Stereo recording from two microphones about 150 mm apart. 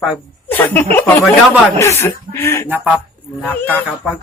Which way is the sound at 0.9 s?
15° left (ahead or behind).